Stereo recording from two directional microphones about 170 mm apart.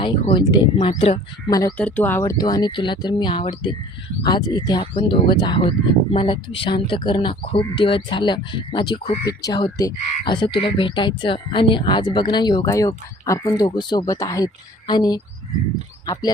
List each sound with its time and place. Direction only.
0.0 s speech: 30° left (ahead or behind)
1.5 s speech: 20° left (ahead or behind)
1.7 s speech: 5° left (ahead or behind)
2.4 s speech: 25° left (ahead or behind)